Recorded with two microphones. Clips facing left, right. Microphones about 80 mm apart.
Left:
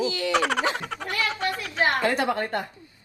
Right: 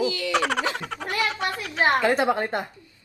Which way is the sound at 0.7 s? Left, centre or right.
Centre.